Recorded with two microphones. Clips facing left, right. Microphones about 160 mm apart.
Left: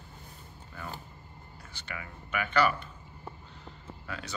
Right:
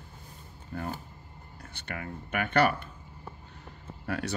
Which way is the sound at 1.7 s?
55° right (ahead or behind).